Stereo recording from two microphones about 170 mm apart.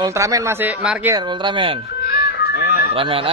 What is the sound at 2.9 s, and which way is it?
Speech, 30° right (ahead or behind).